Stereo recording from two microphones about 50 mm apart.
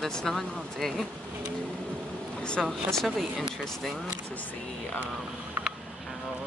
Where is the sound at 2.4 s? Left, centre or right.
Centre.